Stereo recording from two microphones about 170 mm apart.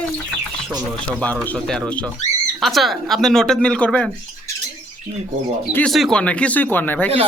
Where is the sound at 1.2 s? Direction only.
5° left (ahead or behind).